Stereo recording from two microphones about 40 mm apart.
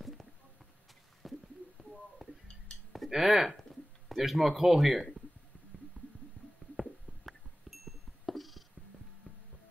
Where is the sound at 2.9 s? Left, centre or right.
Centre.